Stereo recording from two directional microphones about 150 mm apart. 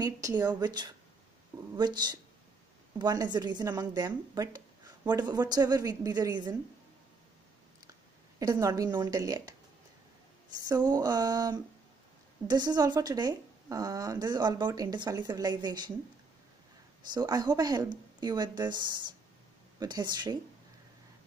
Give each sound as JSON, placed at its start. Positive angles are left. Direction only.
{"t": 0.0, "sound": "speech", "side_deg": -20}
{"t": 8.4, "sound": "speech", "side_deg": -25}
{"t": 10.7, "sound": "speech", "side_deg": -25}
{"t": 17.1, "sound": "speech", "side_deg": -30}